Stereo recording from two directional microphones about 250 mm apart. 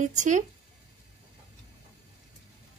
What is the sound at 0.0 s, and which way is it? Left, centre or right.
Speech, right.